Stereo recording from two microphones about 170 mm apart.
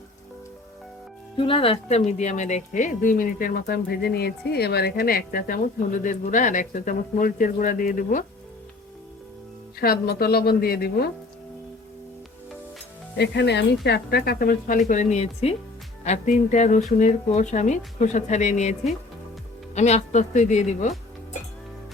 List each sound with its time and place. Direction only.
1.4 s speech: 30° left (ahead or behind); by 8.2 s 55° left (ahead or behind)
9.8 s speech: 60° left (ahead or behind)
13.1 s speech: 90° left
13.8 s speech: 70° left (ahead or behind); by 20.9 s 45° left (ahead or behind)